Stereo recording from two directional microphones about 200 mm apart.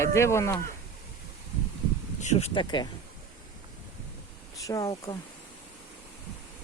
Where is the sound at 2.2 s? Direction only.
35° left (ahead or behind).